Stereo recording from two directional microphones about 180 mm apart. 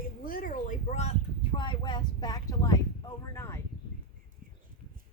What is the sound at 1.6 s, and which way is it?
Speech, 25° left (ahead or behind).